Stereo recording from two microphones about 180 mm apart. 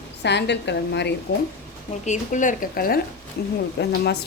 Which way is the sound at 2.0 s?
45° left (ahead or behind).